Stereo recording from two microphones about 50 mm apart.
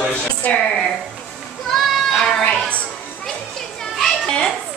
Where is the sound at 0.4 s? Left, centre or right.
Left.